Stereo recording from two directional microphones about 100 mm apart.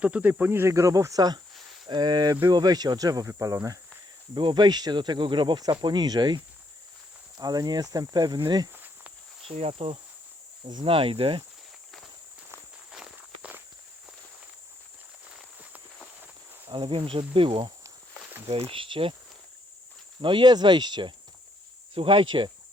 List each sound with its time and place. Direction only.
0.0 s cricket: 15° right (ahead or behind); by 1.4 s 40° right (ahead or behind)
1.9 s speech: 45° right (ahead or behind)
4.4 s speech: 50° right (ahead or behind)
9.5 s cricket: 80° right
10.8 s insect: 65° right (ahead or behind)
12.9 s walk: 5° right (ahead or behind)
16.6 s insect: 60° right (ahead or behind)
20.2 s speech: 50° right (ahead or behind)
21.9 s insect: 60° right (ahead or behind)